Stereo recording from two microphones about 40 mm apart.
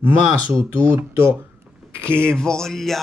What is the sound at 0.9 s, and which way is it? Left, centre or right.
Speech, right.